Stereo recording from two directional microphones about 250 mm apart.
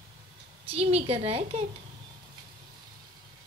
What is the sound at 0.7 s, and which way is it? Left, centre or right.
Speech, right.